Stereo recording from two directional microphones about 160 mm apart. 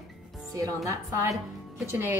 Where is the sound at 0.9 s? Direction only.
20° right (ahead or behind).